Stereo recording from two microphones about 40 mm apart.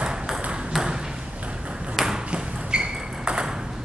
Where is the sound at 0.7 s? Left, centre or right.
Centre.